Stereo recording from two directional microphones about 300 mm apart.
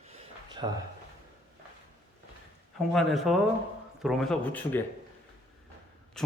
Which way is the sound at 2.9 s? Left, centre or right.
Centre.